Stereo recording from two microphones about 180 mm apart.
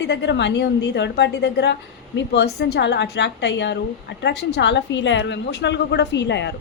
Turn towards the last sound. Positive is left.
turn(degrees=75)  # may be behind; listen again after turning